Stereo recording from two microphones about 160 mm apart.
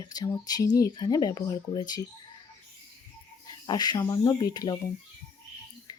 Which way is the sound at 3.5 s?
25° left (ahead or behind).